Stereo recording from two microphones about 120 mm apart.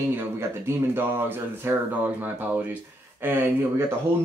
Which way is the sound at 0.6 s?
20° right (ahead or behind).